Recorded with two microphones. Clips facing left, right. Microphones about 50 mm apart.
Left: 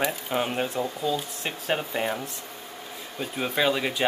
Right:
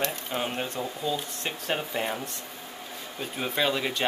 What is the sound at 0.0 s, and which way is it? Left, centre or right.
Speech, centre.